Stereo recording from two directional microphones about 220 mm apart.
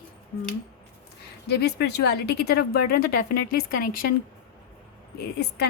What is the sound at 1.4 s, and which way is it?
Speech, 50° left (ahead or behind).